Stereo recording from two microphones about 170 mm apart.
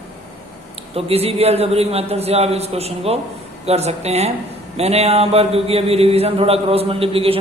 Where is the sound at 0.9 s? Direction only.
35° right (ahead or behind).